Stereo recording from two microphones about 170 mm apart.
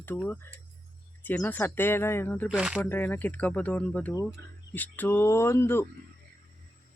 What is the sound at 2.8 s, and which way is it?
Speech, 10° left (ahead or behind).